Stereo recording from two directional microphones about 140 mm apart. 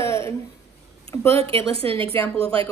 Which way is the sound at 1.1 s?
20° left (ahead or behind).